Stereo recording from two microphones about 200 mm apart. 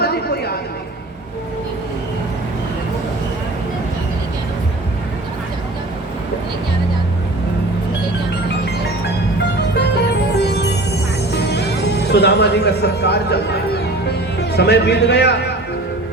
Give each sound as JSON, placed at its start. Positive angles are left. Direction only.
{"t": 0.0, "sound": "a sound", "side_deg": 50}
{"t": 10.3, "sound": "music", "side_deg": 55}
{"t": 14.5, "sound": "a man's voice", "side_deg": 55}